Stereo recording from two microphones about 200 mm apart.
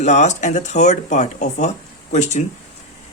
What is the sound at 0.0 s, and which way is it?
Speech, 35° left (ahead or behind).